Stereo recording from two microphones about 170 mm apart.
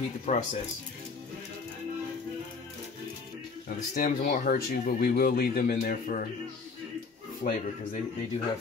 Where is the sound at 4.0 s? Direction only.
55° left (ahead or behind).